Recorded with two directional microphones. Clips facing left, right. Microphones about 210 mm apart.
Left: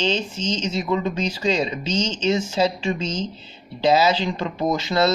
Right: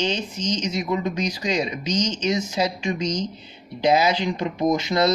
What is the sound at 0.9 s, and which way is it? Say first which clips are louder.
Speech: left 2 dB; 15° right (ahead or behind).